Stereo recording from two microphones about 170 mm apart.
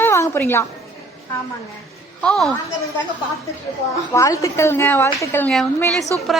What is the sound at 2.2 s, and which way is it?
Speech, 5° left (ahead or behind).